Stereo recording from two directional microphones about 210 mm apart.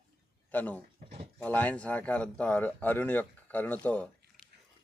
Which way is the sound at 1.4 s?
10° left (ahead or behind).